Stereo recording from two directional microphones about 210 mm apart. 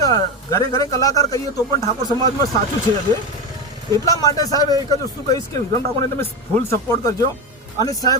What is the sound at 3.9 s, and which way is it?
Speech, 15° left (ahead or behind).